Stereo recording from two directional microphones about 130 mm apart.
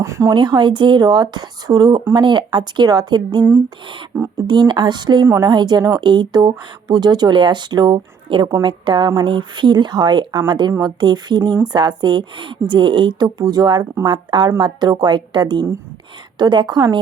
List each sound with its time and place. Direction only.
0.0 s a sound: 20° right (ahead or behind)
0.3 s speech: 35° right (ahead or behind)
4.4 s speech: 35° right (ahead or behind)